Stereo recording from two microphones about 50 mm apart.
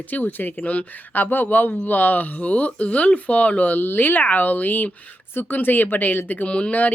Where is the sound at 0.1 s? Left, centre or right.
Left.